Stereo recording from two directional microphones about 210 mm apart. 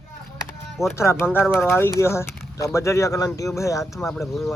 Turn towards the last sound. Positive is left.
turn(degrees=0)  # may be behind; listen again after turning